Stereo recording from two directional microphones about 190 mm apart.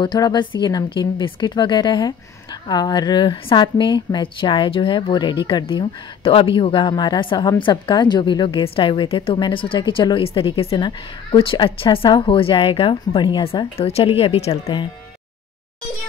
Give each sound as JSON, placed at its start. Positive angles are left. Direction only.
{"t": 0.0, "sound": "a woman's voice", "side_deg": 20}